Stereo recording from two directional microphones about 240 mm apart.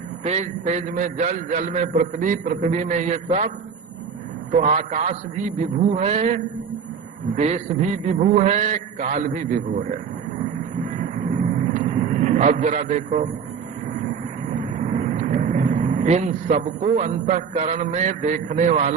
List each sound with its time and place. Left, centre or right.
0.2 s a man's voice: right
11.0 s vehicle: right
14.6 s speech: right